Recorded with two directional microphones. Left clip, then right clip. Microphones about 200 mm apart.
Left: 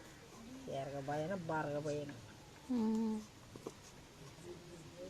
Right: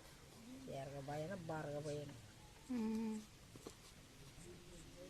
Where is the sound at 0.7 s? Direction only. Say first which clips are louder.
Left 7 dB; 10° left (ahead or behind).